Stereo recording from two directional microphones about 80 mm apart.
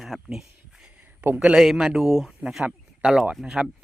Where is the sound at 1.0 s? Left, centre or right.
Right.